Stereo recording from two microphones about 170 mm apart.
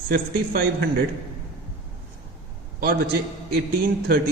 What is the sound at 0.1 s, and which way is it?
Speech, 60° right (ahead or behind).